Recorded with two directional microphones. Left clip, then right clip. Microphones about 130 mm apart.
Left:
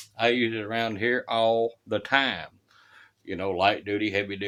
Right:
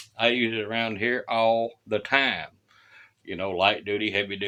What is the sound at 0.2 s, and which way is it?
Speech, 35° left (ahead or behind).